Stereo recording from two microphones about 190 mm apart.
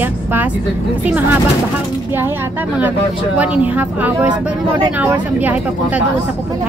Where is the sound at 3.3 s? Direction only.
10° right (ahead or behind).